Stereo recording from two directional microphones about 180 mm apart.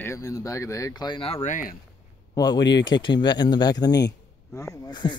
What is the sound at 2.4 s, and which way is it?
A man's voice, 25° left (ahead or behind).